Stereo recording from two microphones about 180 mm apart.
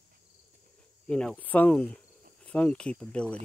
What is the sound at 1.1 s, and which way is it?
Speech, 5° left (ahead or behind).